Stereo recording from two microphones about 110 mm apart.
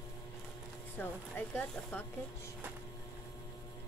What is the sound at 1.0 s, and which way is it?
Speech, 15° left (ahead or behind).